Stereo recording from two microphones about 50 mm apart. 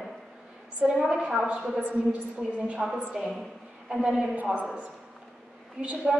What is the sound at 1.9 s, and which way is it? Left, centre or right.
A woman's voice, centre.